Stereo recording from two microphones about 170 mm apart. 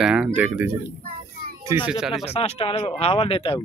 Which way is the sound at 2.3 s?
35° left (ahead or behind).